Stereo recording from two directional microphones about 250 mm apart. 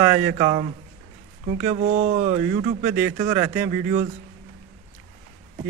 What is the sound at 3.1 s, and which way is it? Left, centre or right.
Speech, centre.